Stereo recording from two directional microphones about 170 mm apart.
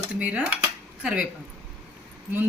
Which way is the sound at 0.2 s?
10° right (ahead or behind).